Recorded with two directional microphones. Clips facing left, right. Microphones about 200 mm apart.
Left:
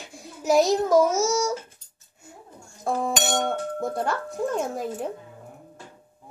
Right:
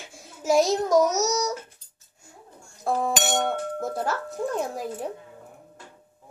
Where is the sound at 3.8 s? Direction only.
Centre (ahead or behind).